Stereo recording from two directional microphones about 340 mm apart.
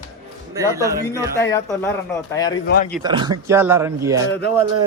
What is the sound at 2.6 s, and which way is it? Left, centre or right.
Speech, left.